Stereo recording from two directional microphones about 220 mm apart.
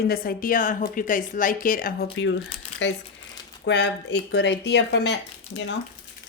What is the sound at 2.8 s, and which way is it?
Speech, 55° left (ahead or behind).